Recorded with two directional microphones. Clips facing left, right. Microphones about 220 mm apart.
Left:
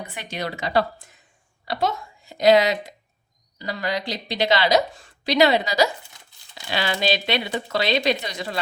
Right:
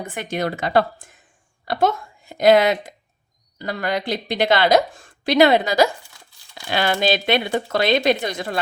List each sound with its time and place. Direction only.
0.0 s a woman's voice: 50° right (ahead or behind)